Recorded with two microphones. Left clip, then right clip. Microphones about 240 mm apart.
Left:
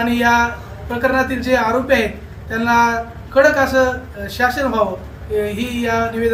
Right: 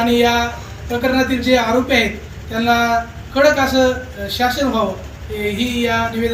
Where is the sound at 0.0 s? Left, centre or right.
Centre.